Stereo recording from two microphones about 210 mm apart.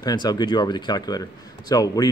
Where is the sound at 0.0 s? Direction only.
20° left (ahead or behind).